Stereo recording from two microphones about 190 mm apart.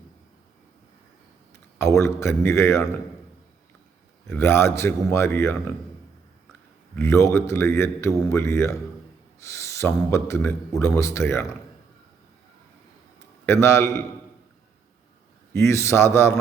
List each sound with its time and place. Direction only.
1.8 s a man's voice: 15° left (ahead or behind)
4.4 s a man's voice: 15° left (ahead or behind)
6.9 s a man's voice: 15° left (ahead or behind)
13.4 s a man's voice: 15° left (ahead or behind)
15.5 s a man's voice: 15° left (ahead or behind)